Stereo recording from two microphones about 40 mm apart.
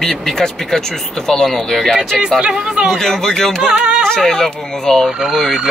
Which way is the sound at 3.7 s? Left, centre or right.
Right.